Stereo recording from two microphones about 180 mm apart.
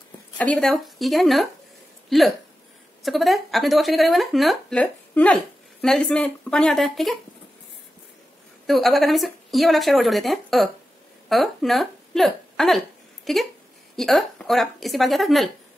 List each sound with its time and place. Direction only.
0.4 s a woman's voice: 5° left (ahead or behind)
8.6 s a woman's voice: centre (ahead or behind)